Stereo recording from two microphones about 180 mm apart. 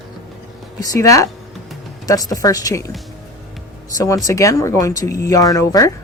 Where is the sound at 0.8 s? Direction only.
20° left (ahead or behind).